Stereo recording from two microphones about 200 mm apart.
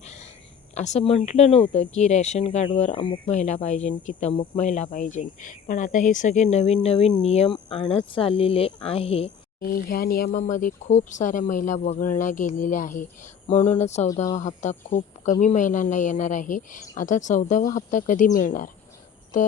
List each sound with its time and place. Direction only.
0.0 s a sound: 35° left (ahead or behind)
0.7 s speech: 35° left (ahead or behind)
3.3 s speech: 40° left (ahead or behind)
9.6 s speech: 45° left (ahead or behind)